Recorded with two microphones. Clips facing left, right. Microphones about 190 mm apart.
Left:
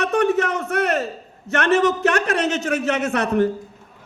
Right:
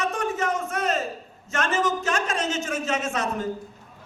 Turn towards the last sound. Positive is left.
turn(degrees=65)  # may be behind; listen again after turning